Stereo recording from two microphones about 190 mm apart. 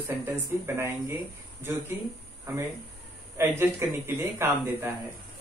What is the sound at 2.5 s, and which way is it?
A man's voice, 15° right (ahead or behind).